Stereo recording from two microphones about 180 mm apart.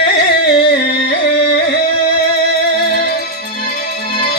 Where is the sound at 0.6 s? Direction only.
60° left (ahead or behind).